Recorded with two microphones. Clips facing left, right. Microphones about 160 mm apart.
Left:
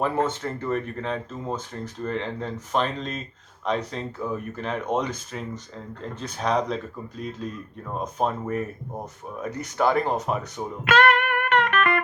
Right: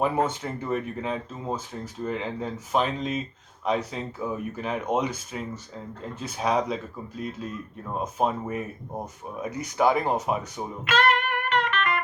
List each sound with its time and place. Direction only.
0.0 s speech: 10° right (ahead or behind)
10.8 s music: 50° left (ahead or behind)